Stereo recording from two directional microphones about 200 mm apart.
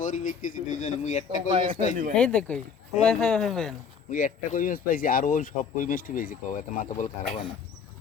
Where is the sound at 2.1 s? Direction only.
5° left (ahead or behind).